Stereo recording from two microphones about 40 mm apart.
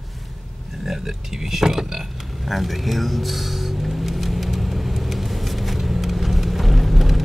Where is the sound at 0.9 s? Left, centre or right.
Centre.